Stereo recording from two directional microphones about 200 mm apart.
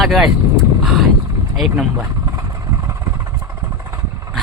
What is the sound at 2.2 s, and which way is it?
Vehicle, 15° right (ahead or behind).